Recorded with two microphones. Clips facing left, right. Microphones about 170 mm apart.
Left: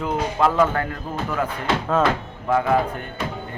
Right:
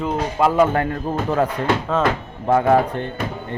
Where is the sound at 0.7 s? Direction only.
30° right (ahead or behind).